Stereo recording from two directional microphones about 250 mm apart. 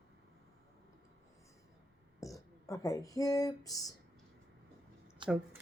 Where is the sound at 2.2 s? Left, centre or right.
Centre.